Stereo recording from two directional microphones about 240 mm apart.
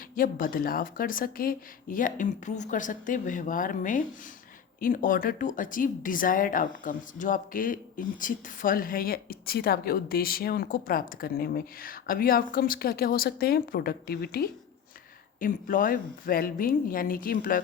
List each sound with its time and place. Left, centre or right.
0.2 s speech: left